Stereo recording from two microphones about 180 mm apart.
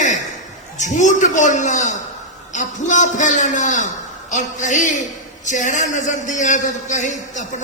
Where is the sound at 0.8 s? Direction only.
45° left (ahead or behind).